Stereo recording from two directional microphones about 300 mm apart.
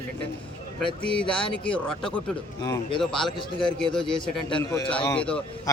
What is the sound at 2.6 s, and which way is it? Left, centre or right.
A man's voice, centre.